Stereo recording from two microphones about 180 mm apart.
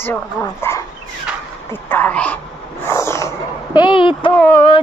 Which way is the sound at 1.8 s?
10° left (ahead or behind).